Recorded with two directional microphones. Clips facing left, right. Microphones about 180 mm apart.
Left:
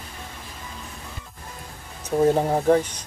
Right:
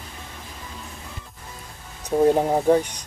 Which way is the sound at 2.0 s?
10° right (ahead or behind).